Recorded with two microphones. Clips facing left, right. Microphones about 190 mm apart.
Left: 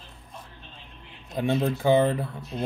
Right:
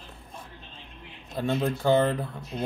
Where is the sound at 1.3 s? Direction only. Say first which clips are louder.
Left 2 dB; 15° left (ahead or behind).